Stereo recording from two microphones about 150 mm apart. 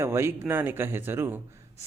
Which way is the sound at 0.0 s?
15° right (ahead or behind).